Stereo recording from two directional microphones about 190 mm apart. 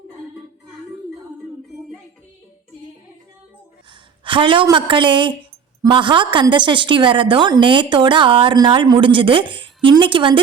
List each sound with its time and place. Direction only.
4.2 s a woman's voice: 25° right (ahead or behind)